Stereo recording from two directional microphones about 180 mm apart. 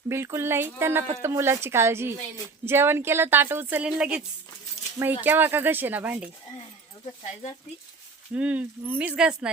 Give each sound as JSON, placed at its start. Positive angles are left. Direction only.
{"t": 0.1, "sound": "speech", "side_deg": -15}
{"t": 4.8, "sound": "speech", "side_deg": 35}
{"t": 5.2, "sound": "speech", "side_deg": -10}
{"t": 8.3, "sound": "speech", "side_deg": -10}